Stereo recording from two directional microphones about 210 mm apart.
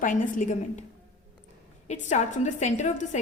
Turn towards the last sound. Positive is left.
turn(degrees=35)  # may be behind; listen again after turning